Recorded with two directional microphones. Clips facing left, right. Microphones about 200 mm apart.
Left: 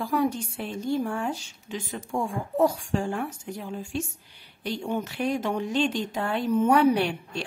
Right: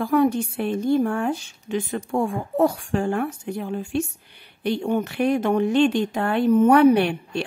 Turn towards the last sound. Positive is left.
turn(degrees=-60)  # may be behind; listen again after turning